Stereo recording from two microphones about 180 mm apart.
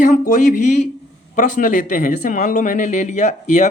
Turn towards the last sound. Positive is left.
turn(degrees=40)  # may be behind; listen again after turning